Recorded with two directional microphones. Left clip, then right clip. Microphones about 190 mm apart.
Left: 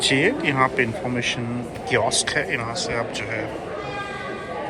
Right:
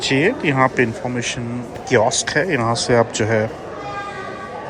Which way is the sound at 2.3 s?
25° right (ahead or behind).